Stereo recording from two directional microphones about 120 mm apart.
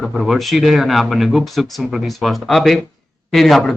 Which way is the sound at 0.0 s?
Centre (ahead or behind).